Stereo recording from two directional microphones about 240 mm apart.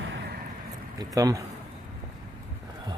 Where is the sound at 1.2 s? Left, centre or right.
Centre.